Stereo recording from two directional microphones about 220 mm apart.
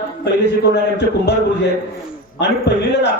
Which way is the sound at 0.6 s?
50° left (ahead or behind).